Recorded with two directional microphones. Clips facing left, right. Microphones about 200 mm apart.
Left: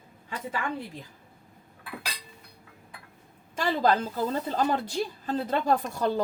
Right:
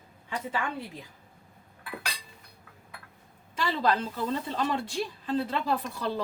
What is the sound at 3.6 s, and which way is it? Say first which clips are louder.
A woman's voice: left 3 dB; 40° left (ahead or behind).